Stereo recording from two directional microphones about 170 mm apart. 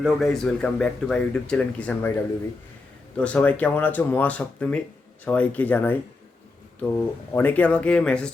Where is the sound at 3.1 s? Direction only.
10° left (ahead or behind).